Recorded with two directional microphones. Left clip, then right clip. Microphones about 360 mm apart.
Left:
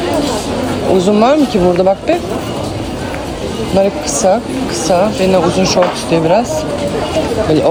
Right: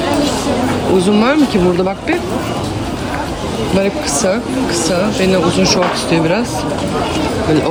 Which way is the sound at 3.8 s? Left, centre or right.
Centre.